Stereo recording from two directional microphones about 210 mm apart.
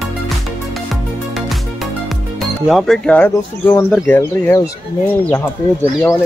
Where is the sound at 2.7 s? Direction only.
Centre (ahead or behind).